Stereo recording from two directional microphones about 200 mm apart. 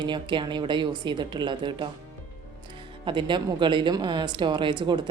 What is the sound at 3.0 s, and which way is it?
Speech, 25° right (ahead or behind).